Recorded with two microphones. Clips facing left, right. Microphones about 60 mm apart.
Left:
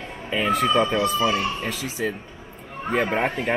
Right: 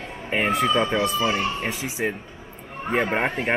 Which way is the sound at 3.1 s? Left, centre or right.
Right.